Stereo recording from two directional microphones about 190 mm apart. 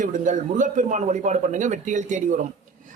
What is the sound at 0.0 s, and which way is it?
A man's voice, 40° right (ahead or behind).